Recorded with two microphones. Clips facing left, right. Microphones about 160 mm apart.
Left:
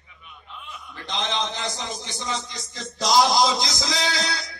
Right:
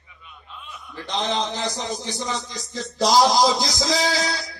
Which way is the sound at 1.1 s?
40° right (ahead or behind).